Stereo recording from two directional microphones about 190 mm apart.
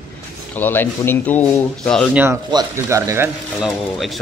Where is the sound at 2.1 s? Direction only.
10° right (ahead or behind).